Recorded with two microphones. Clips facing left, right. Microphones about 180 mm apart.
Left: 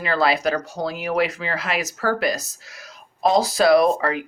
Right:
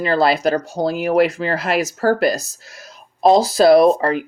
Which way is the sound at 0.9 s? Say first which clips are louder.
Right 7 dB; 45° right (ahead or behind).